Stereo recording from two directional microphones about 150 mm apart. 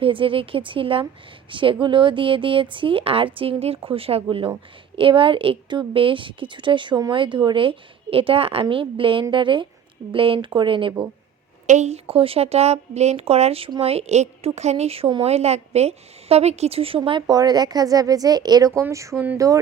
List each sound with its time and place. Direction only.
0.0 s a woman's voice: 35° right (ahead or behind)
11.6 s a woman's voice: 50° right (ahead or behind); by 19.6 s 20° right (ahead or behind)